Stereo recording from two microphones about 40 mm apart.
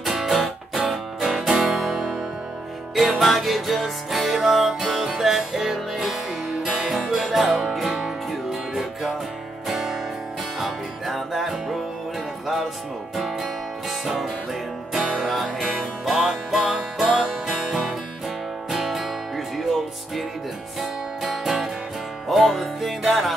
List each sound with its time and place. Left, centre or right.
0.0 s music: centre
13.1 s music: centre
16.6 s music: right
17.5 s music: centre